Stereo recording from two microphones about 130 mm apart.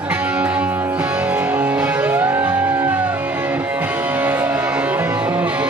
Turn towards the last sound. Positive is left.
turn(degrees=-10)  # may be behind; listen again after turning